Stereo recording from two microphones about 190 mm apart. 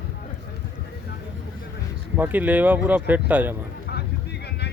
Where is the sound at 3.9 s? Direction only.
60° left (ahead or behind).